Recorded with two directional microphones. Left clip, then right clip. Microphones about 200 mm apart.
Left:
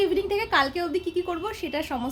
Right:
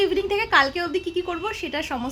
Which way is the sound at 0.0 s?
Centre (ahead or behind).